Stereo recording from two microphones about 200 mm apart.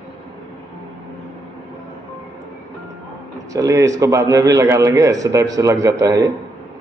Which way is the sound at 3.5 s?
15° right (ahead or behind).